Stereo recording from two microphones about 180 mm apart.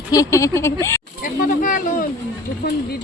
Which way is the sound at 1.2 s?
50° left (ahead or behind).